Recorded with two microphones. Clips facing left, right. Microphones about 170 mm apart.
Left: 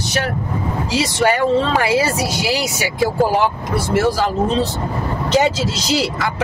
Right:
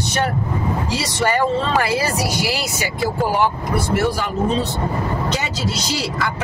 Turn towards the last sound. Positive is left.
turn(degrees=90)